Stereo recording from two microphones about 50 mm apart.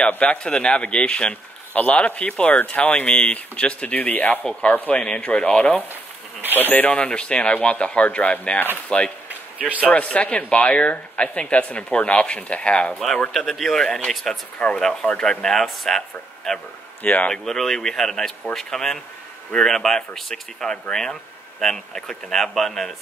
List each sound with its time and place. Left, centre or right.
0.2 s speech: left
1.7 s speech: left
4.5 s speech: left
5.0 s speech: centre
6.6 s speech: left
9.6 s speech: right
9.8 s speech: left
13.5 s speech: centre
17.0 s speech: left
17.3 s speech: centre